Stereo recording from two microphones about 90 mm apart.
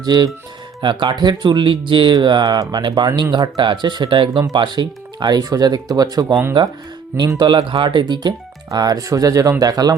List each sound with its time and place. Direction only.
0.0 s speech: 50° right (ahead or behind)
7.3 s speech: 60° right (ahead or behind)
8.7 s speech: 45° right (ahead or behind)